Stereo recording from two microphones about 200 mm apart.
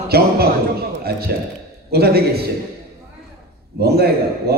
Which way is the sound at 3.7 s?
50° right (ahead or behind).